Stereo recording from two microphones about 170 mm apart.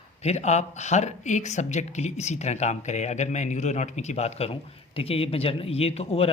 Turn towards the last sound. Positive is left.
turn(degrees=35)  # may be behind; listen again after turning